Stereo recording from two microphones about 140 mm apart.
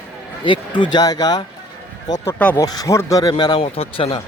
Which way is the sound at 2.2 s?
15° left (ahead or behind).